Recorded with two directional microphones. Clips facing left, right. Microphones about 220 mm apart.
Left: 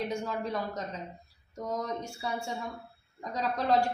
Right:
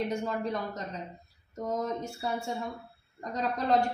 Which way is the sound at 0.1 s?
Centre (ahead or behind).